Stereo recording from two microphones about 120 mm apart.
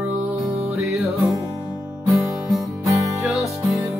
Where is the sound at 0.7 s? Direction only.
Centre (ahead or behind).